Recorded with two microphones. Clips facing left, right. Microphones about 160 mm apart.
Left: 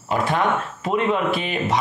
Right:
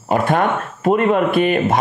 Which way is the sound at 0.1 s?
50° right (ahead or behind).